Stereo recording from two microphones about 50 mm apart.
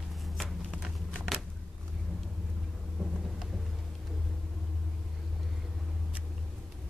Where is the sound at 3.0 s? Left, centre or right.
Centre.